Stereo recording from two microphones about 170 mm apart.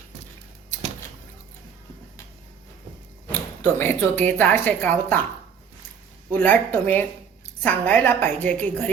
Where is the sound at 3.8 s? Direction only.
10° left (ahead or behind).